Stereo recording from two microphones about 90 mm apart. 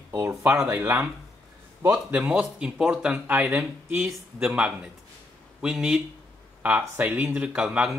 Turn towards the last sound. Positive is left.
turn(degrees=-5)  # may be behind; listen again after turning